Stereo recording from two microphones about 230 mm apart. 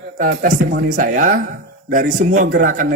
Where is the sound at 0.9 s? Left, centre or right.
Right.